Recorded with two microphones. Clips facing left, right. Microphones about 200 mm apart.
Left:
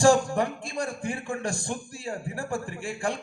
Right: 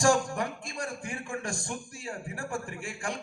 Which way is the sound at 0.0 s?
30° left (ahead or behind).